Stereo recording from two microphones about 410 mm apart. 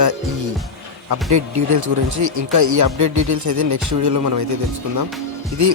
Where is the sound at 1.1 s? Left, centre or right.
Right.